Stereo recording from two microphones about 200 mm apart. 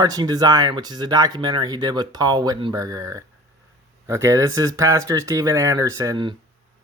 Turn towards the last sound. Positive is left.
turn(degrees=-20)  # may be behind; listen again after turning